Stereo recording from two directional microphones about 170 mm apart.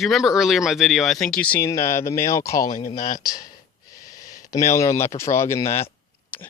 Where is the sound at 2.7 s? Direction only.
45° left (ahead or behind).